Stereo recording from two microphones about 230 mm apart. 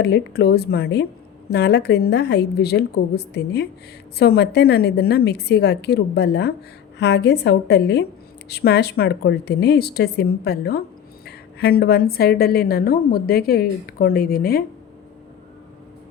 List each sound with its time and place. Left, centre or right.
0.0 s a woman's voice: left